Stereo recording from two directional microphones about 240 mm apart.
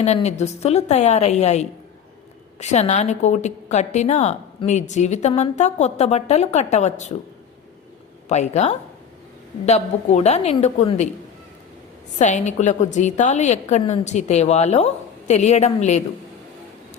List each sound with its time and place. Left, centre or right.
0.0 s a woman's voice: left
8.3 s a woman's voice: left
12.2 s a woman's voice: left